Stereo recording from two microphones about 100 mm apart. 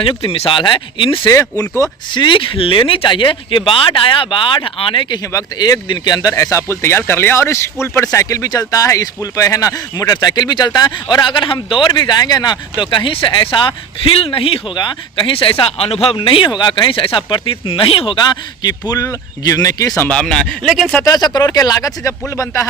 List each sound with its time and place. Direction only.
0.0 s speech: 65° left (ahead or behind)
1.3 s speech: 35° left (ahead or behind)
2.1 s speech: 55° left (ahead or behind)
5.3 s speech: 35° left (ahead or behind); by 14.6 s 70° left (ahead or behind)
14.8 s speech: 55° left (ahead or behind); by 19.9 s 35° left (ahead or behind)
20.1 s speech: 10° left (ahead or behind)
21.0 s speech: 40° left (ahead or behind)